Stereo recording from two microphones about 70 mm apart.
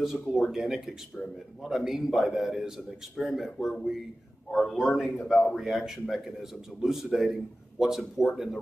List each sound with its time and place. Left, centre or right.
0.0 s a man's voice: centre